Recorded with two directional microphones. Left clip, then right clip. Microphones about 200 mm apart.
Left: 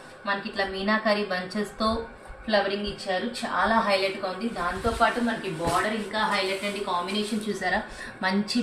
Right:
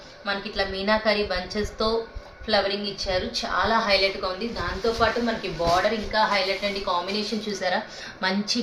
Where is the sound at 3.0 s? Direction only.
50° right (ahead or behind).